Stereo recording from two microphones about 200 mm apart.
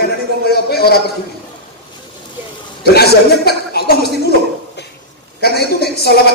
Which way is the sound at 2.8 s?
55° left (ahead or behind).